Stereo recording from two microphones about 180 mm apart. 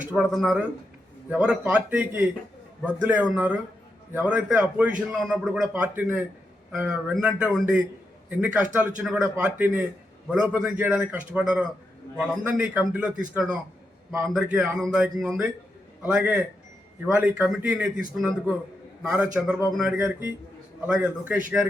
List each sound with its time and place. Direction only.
0.0 s a man's voice: 5° right (ahead or behind)